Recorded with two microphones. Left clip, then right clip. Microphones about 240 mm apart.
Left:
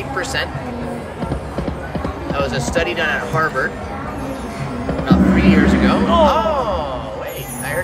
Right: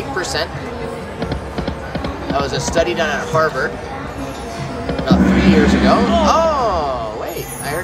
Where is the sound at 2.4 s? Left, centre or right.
Centre.